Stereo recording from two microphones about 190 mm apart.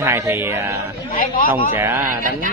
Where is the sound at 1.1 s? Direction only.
45° left (ahead or behind).